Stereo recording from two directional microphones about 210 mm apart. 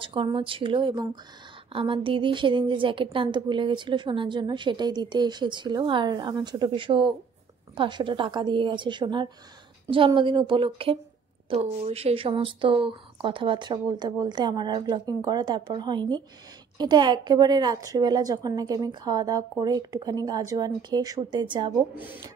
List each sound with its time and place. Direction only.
0.0 s a woman's voice: 25° right (ahead or behind)
21.9 s speech: 10° right (ahead or behind)